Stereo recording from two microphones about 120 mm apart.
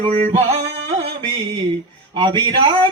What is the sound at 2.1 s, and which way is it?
Speech, 40° right (ahead or behind).